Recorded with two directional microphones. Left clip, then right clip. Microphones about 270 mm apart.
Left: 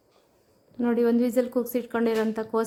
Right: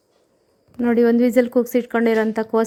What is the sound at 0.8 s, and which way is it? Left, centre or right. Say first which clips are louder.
A woman's voice: right 7 dB; centre.